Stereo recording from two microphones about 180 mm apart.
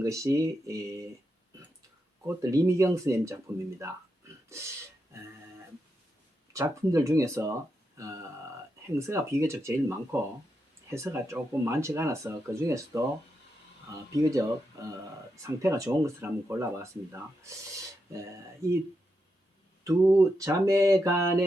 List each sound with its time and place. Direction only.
0.0 s speech: 15° right (ahead or behind)
2.2 s speech: 15° right (ahead or behind)
6.5 s speech: 15° right (ahead or behind)
7.9 s a sound: 15° right (ahead or behind)
9.0 s speech: 15° right (ahead or behind)
14.3 s speech: 15° right (ahead or behind)
19.8 s speech: 15° right (ahead or behind)